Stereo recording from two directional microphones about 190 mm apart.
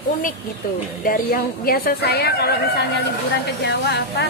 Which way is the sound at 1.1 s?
50° left (ahead or behind).